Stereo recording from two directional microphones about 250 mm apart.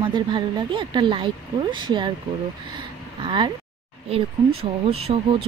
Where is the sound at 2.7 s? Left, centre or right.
Centre.